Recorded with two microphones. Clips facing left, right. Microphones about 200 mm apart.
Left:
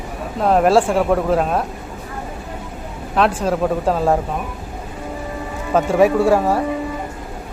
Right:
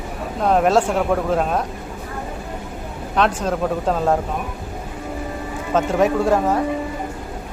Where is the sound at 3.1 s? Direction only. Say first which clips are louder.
Left 2 dB; 5° left (ahead or behind).